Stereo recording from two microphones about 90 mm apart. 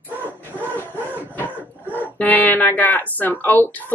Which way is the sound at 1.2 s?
20° left (ahead or behind).